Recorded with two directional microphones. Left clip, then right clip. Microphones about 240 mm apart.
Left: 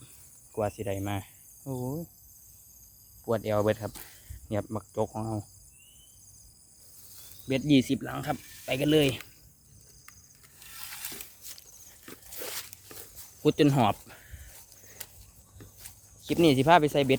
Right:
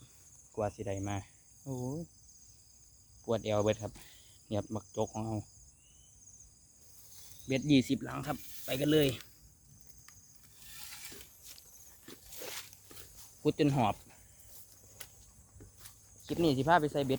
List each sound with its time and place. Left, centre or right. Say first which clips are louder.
0.5 s cricket: left 5 dB; centre
3.2 s speech: left 4 dB; centre
7.4 s speech: left 4 dB; centre
11.5 s a sound: left 5 dB; left
11.9 s walk: left 4 dB; centre
16.3 s speech: left 7 dB; left